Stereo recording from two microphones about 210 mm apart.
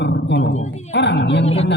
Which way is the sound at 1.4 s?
30° left (ahead or behind).